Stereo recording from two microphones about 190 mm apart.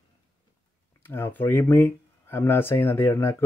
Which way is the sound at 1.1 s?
10° left (ahead or behind).